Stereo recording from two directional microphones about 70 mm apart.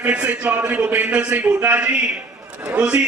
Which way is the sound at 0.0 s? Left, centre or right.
Centre.